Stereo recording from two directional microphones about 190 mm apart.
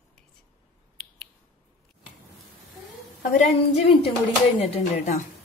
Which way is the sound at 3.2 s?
50° left (ahead or behind).